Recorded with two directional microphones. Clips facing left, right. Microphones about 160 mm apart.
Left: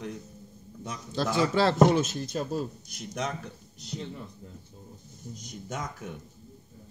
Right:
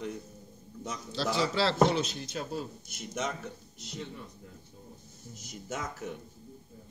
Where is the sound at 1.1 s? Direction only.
50° left (ahead or behind).